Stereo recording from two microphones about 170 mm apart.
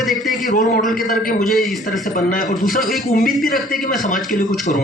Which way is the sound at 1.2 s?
50° left (ahead or behind).